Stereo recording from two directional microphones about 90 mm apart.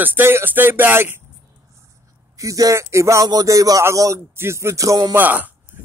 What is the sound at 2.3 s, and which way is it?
Speech, 40° right (ahead or behind).